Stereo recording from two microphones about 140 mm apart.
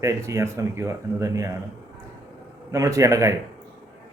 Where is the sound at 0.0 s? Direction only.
20° right (ahead or behind).